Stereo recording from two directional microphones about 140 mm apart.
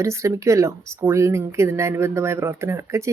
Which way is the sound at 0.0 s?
20° right (ahead or behind).